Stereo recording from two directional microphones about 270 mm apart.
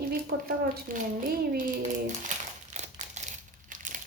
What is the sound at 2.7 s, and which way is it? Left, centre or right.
Crumpling, right.